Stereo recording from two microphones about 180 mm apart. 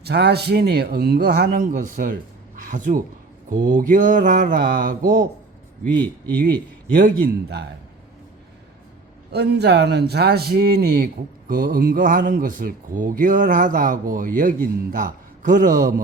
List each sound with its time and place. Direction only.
0.0 s speech: 65° right (ahead or behind); by 5.2 s 50° right (ahead or behind)
6.3 s speech: 55° right (ahead or behind)
9.3 s speech: 65° right (ahead or behind); by 16.0 s 45° right (ahead or behind)